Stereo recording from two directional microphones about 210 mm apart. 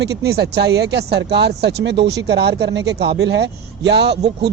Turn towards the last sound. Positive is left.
turn(degrees=-50)  # may be behind; listen again after turning